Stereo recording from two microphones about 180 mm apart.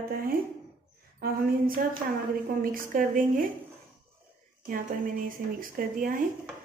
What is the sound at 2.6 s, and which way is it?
Speech, 50° right (ahead or behind).